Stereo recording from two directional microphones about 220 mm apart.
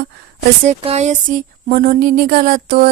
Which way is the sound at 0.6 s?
30° right (ahead or behind).